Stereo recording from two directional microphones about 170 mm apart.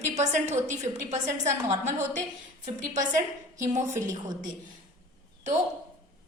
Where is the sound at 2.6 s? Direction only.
45° right (ahead or behind).